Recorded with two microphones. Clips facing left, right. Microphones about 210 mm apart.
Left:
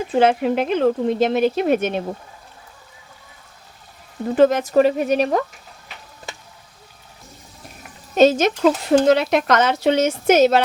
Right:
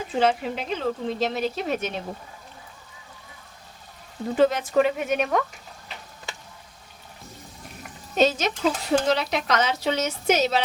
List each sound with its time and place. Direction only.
0.1 s speech: 60° left (ahead or behind)
4.4 s speech: 45° left (ahead or behind)
8.1 s speech: 50° left (ahead or behind)